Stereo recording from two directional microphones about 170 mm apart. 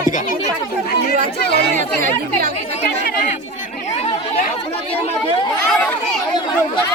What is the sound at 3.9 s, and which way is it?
Chatter, 40° left (ahead or behind).